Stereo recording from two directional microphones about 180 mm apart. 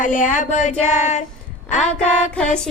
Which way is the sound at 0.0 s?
45° left (ahead or behind).